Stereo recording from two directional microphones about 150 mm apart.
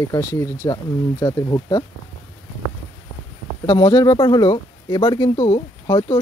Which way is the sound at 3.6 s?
30° left (ahead or behind).